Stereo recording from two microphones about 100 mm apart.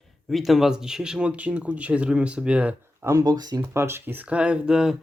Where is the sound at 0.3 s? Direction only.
Centre (ahead or behind).